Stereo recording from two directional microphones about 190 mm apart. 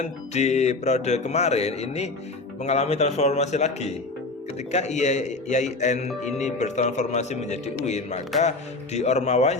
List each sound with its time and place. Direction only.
0.0 s mantra: 35° left (ahead or behind)